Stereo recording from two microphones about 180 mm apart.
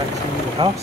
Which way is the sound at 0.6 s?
30° right (ahead or behind).